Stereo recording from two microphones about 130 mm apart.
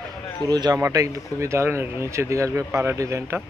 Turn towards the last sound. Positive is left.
turn(degrees=-20)  # may be behind; listen again after turning